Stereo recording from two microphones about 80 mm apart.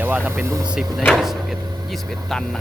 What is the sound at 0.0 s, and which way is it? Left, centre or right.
Speech, right.